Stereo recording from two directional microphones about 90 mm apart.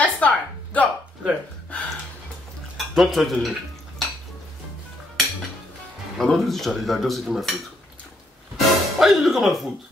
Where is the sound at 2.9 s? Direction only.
Centre (ahead or behind).